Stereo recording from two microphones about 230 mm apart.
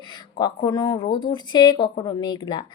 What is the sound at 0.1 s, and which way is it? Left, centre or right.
Speech, centre.